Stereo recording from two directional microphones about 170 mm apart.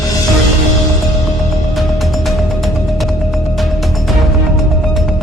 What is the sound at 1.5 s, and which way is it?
Music, centre (ahead or behind).